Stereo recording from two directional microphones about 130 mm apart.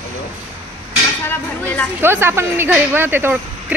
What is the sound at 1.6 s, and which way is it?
Speech, 15° left (ahead or behind).